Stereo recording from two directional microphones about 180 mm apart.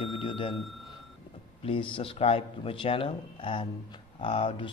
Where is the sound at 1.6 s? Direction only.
30° left (ahead or behind).